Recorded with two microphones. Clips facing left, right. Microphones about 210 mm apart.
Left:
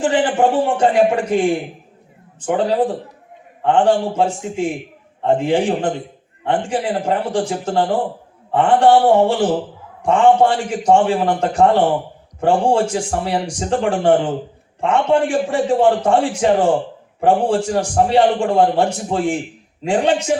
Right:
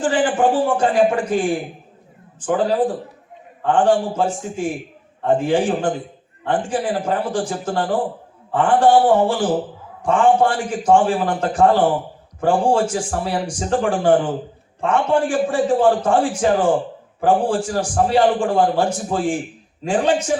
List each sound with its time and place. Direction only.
0.0 s a man's voice: 25° left (ahead or behind)